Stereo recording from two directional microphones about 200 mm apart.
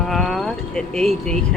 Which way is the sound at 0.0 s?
Centre (ahead or behind).